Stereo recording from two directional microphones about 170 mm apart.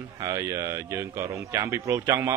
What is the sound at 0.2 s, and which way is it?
A man's voice, 20° right (ahead or behind).